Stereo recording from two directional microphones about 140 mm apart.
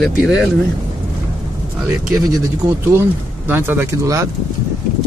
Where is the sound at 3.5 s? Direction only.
15° right (ahead or behind).